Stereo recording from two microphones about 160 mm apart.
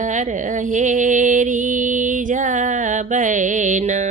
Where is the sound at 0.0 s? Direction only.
50° right (ahead or behind).